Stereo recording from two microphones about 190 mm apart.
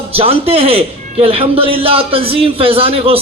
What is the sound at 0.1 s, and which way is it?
A man's voice, 30° right (ahead or behind).